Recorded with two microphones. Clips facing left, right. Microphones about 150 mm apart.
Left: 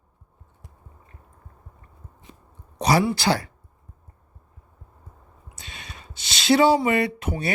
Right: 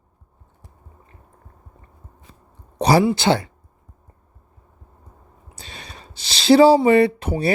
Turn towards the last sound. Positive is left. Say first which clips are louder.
# right 7 dB
turn(degrees=-30)  # may be behind; listen again after turning